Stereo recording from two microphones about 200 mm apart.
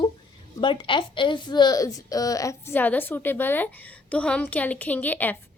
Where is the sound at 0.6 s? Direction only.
25° left (ahead or behind).